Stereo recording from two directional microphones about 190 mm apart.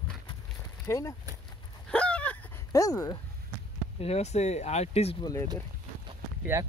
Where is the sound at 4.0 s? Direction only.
35° left (ahead or behind).